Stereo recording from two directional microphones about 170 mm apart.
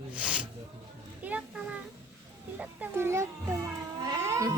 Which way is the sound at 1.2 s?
10° right (ahead or behind).